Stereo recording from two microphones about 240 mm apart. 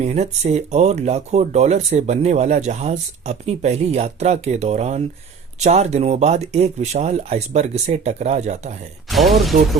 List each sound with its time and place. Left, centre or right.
0.0 s speech: right
9.0 s speech: centre